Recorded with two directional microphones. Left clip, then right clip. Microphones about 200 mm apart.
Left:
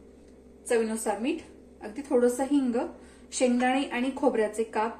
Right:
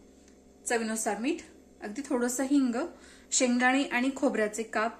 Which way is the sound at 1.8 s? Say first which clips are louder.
Left 6 dB; 45° right (ahead or behind).